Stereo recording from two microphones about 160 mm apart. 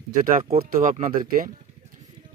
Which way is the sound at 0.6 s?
60° right (ahead or behind).